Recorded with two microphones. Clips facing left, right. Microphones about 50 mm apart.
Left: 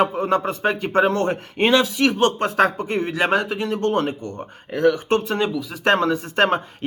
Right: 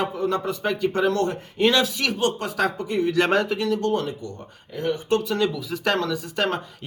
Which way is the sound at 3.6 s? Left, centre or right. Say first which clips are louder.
Left 2 dB; left.